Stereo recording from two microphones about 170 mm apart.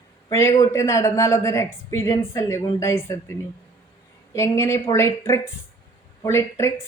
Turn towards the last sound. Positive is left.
turn(degrees=15)  # may be behind; listen again after turning